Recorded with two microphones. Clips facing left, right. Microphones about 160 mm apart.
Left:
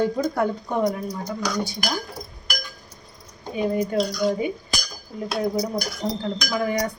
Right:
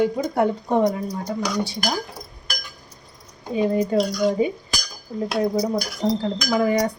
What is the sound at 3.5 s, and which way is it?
Speech, 30° right (ahead or behind).